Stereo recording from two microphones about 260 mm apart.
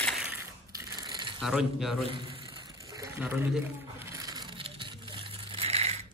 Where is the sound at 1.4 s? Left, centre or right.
Centre.